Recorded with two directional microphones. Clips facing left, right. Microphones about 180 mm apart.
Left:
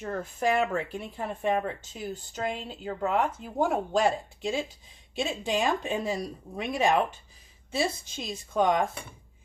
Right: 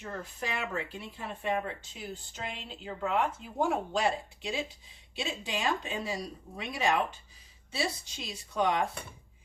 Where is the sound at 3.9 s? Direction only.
45° left (ahead or behind).